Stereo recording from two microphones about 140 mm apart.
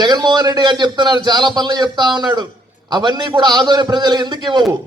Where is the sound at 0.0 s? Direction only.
30° right (ahead or behind).